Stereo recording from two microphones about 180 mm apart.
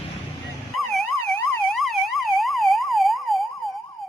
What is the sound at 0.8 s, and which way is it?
Emergency vehicle, centre (ahead or behind).